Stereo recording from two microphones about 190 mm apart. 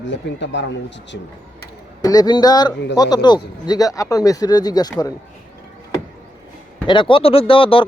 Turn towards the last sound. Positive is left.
turn(degrees=30)  # may be behind; listen again after turning